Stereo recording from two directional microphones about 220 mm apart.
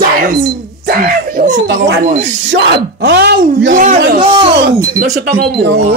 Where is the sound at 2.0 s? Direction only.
35° right (ahead or behind).